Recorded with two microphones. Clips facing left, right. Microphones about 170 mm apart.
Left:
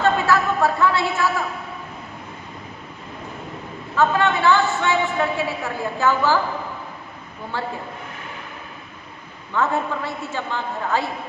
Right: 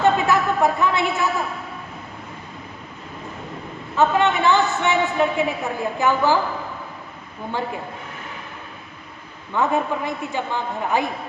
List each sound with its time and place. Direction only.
0.0 s a sound: 20° right (ahead or behind)
3.9 s a woman's voice: 20° right (ahead or behind)
9.6 s a woman's voice: 15° right (ahead or behind)